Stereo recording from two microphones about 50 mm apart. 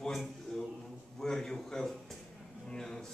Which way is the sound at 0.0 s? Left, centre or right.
Centre.